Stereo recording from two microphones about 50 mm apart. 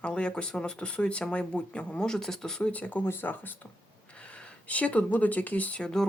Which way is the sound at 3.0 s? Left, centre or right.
Left.